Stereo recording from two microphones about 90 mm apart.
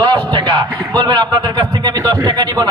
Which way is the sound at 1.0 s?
50° right (ahead or behind).